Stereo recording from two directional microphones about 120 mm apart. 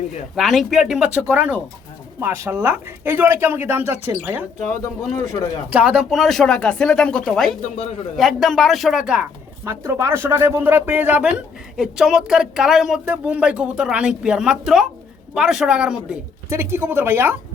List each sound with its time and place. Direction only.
0.3 s speech: centre (ahead or behind)
4.7 s speech: 25° left (ahead or behind)
5.7 s speech: 10° right (ahead or behind)
7.8 s a man's voice: 65° left (ahead or behind)
8.1 s speech: centre (ahead or behind)
9.6 s speech: 25° right (ahead or behind); by 16.1 s 5° right (ahead or behind)
16.5 s speech: 20° right (ahead or behind)